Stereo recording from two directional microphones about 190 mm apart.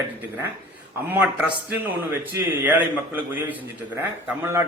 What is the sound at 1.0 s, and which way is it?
A man's voice, 10° right (ahead or behind).